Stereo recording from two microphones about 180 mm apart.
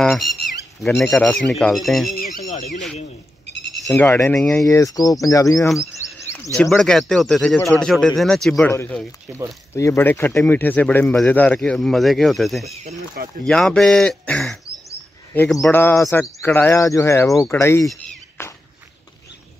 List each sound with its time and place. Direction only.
0.0 s speech: centre (ahead or behind)
2.3 s speech: 45° left (ahead or behind)
3.8 s speech: 5° left (ahead or behind)
4.6 s speech: 15° left (ahead or behind)
6.2 s bird: 15° left (ahead or behind)
6.7 s speech: centre (ahead or behind)
12.8 s speech: 55° right (ahead or behind)
13.5 s speech: 5° left (ahead or behind)
15.8 s speech: 15° left (ahead or behind)
18.4 s walk: 15° left (ahead or behind)